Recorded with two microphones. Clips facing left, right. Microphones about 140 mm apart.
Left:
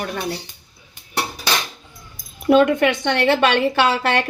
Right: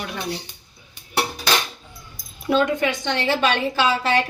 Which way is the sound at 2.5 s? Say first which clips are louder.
Left 6 dB; 60° left (ahead or behind).